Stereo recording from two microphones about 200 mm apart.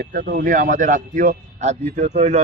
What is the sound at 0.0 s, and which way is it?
A man's voice, 50° right (ahead or behind).